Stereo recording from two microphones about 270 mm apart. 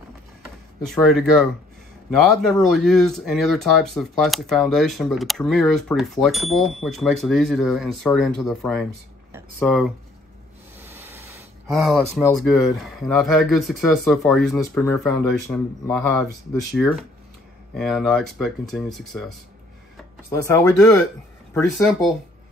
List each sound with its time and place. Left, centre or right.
0.8 s speech: centre
20.2 s speech: centre
21.5 s speech: centre